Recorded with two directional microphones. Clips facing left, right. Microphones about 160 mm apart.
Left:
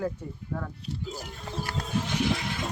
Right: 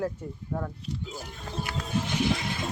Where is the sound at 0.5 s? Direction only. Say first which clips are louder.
Right 2 dB; 15° right (ahead or behind).